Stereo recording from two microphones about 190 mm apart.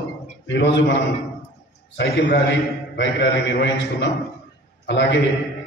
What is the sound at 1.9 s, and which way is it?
A man's voice, 65° left (ahead or behind).